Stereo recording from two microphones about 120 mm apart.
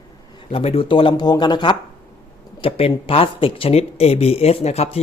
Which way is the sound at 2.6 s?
50° left (ahead or behind).